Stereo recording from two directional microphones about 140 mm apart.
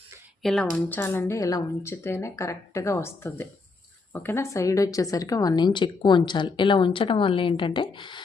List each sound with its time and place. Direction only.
0.4 s a woman's voice: 5° left (ahead or behind); by 8.2 s 35° left (ahead or behind)